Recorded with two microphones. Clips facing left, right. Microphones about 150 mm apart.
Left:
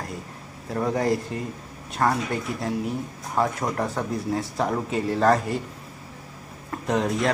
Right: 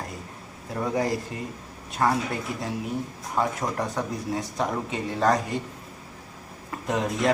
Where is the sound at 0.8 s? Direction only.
Centre (ahead or behind).